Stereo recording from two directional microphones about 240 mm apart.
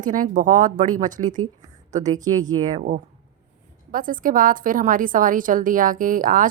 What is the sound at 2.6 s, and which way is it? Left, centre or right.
A woman's voice, right.